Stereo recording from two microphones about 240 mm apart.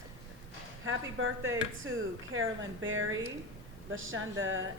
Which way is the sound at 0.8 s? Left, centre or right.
Right.